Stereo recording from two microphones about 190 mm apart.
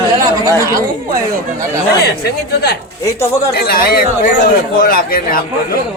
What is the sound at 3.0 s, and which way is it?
Speech, 15° left (ahead or behind).